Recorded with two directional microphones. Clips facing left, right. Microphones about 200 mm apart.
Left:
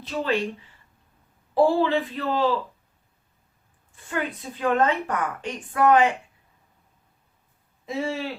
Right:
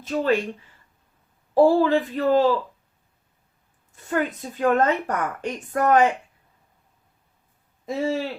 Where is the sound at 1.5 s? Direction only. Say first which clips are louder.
Right 3 dB; 40° right (ahead or behind).